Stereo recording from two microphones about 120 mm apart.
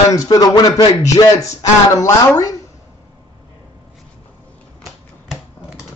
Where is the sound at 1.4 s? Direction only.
25° left (ahead or behind).